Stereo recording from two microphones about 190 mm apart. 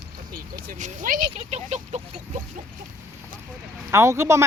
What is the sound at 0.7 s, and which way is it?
Speech, 45° right (ahead or behind).